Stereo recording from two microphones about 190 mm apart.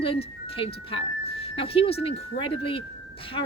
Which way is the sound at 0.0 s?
30° left (ahead or behind).